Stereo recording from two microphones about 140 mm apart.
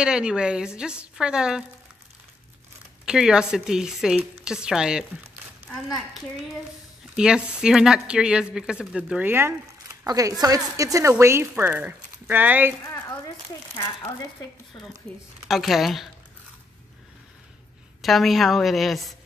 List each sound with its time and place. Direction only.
0.0 s speech: 5° right (ahead or behind)
3.1 s speech: 5° right (ahead or behind)
7.2 s speech: 5° right (ahead or behind)
10.0 s a woman's voice: 25° right (ahead or behind)
12.8 s a sound: 15° left (ahead or behind)
15.4 s speech: centre (ahead or behind)
18.0 s speech: centre (ahead or behind)